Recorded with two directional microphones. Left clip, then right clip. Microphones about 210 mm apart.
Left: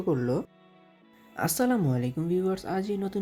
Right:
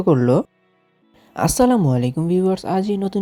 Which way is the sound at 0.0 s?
30° right (ahead or behind).